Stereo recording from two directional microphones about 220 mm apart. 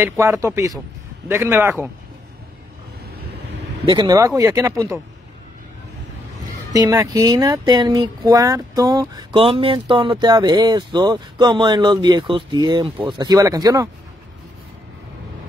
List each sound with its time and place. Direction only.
0.0 s speech: 15° right (ahead or behind)
3.8 s speech: 20° right (ahead or behind)
6.7 s speech: 15° right (ahead or behind)